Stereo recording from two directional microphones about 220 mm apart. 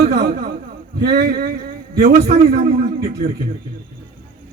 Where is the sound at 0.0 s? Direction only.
45° right (ahead or behind).